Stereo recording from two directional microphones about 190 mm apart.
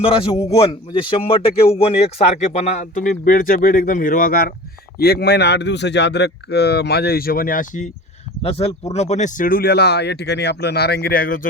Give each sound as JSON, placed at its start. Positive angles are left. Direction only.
{"t": 0.0, "sound": "a man's voice", "side_deg": 30}
{"t": 8.4, "sound": "speech", "side_deg": 30}